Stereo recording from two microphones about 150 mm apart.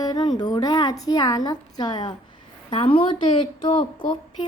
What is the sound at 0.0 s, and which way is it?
Speech, 25° left (ahead or behind).